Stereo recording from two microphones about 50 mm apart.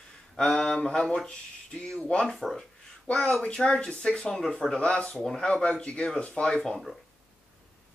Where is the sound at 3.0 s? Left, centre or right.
Left.